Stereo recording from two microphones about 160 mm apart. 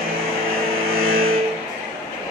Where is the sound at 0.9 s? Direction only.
65° right (ahead or behind).